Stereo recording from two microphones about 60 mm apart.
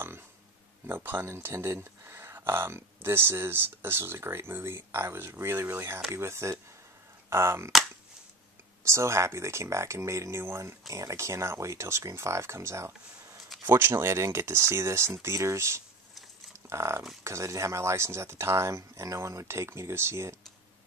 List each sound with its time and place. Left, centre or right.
0.8 s speech: right
8.8 s speech: right
13.7 s speech: right